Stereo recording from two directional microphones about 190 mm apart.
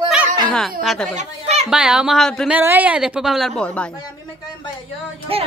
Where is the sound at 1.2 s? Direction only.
35° right (ahead or behind).